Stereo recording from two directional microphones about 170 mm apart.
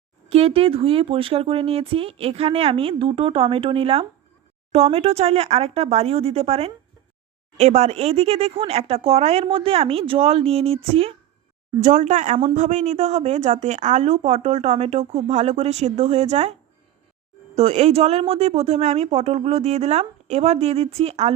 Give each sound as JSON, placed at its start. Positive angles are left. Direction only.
{"t": 0.3, "sound": "speech", "side_deg": -35}
{"t": 11.8, "sound": "a woman's voice", "side_deg": -45}